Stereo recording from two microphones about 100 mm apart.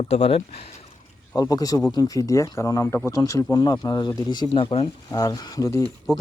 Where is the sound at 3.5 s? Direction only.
45° left (ahead or behind).